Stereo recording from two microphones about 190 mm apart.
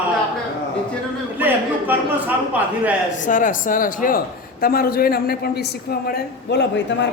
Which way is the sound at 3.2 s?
45° left (ahead or behind).